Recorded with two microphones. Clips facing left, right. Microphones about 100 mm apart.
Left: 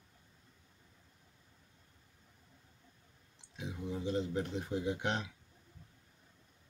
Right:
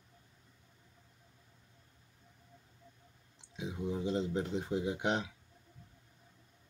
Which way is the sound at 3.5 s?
20° right (ahead or behind).